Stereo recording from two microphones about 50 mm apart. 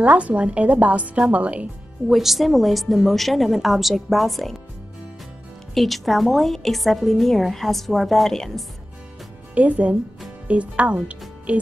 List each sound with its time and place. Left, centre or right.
0.0 s a woman's voice: right
2.0 s a woman's voice: centre
5.8 s a woman's voice: centre
9.6 s a woman's voice: right